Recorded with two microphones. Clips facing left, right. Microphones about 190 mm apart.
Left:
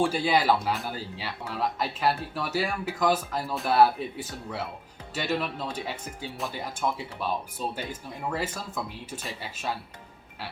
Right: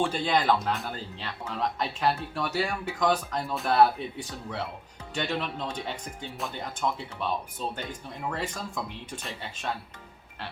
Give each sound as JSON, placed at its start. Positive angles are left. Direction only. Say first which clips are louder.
{"t": 0.0, "sound": "speech", "louder": "left 2 dB", "side_deg": 10}